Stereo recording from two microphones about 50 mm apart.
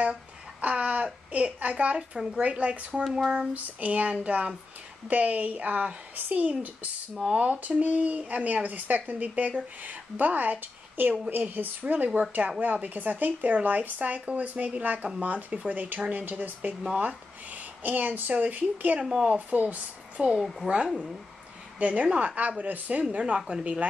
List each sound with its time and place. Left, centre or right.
0.6 s a sound: right
1.0 s a woman's voice: right
2.0 s speech: centre
2.4 s speech: right
18.9 s speech: centre
19.2 s speech: right